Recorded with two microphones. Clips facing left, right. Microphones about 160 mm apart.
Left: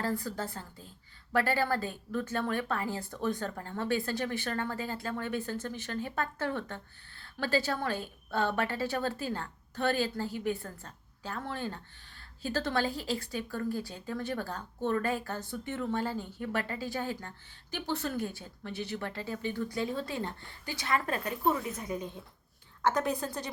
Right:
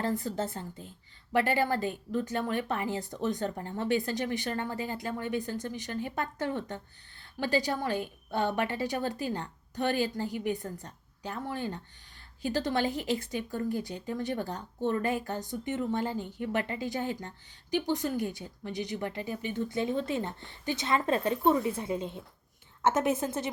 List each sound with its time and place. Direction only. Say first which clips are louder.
0.0 s a woman's voice: right 3 dB; 20° right (ahead or behind)